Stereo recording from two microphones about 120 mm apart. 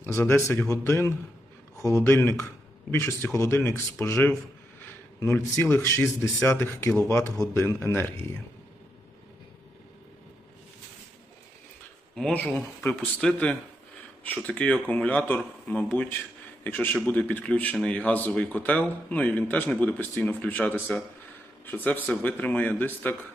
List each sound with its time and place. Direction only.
0.0 s speech: 20° left (ahead or behind)
12.2 s a man's voice: 10° left (ahead or behind)